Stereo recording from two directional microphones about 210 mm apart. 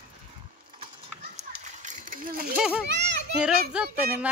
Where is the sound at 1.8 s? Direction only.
35° right (ahead or behind).